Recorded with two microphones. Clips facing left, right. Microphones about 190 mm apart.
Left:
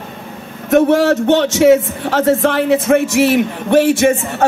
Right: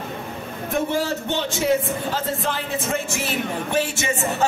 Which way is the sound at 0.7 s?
75° left (ahead or behind).